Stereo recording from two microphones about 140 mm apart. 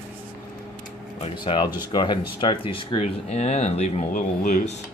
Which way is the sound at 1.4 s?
35° left (ahead or behind).